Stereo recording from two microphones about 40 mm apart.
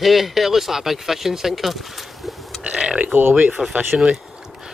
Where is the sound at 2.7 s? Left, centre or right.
Right.